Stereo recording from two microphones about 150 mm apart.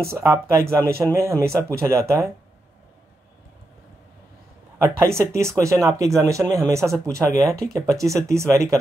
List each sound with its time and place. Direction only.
0.0 s speech: 20° right (ahead or behind)
4.8 s speech: 20° right (ahead or behind)